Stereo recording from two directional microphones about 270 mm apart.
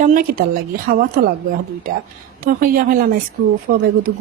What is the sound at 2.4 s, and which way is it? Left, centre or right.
A woman's voice, right.